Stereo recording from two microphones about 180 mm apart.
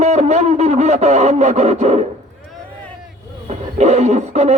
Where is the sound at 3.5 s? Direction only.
35° right (ahead or behind).